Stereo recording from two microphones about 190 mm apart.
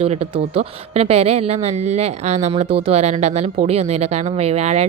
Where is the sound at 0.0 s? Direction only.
30° right (ahead or behind).